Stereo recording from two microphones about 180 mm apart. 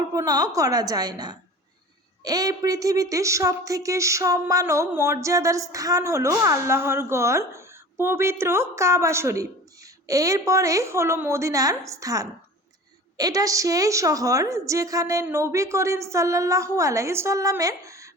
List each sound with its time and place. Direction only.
0.1 s a woman's voice: 20° right (ahead or behind)